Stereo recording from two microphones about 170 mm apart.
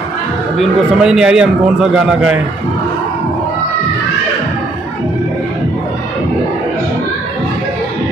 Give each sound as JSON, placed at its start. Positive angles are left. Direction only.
{"t": 0.6, "sound": "a man's voice", "side_deg": -5}